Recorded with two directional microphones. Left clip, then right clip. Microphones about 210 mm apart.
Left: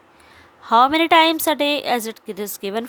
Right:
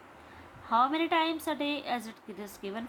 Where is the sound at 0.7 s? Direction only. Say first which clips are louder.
Left 13 dB; 55° left (ahead or behind).